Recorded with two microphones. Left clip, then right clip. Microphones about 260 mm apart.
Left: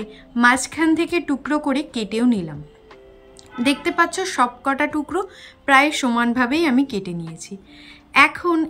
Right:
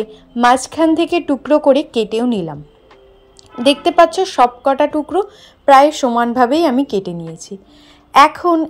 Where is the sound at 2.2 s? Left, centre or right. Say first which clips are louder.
Right 3 dB; right.